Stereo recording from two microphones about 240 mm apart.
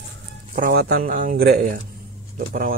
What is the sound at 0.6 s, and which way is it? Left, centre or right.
Speech, right.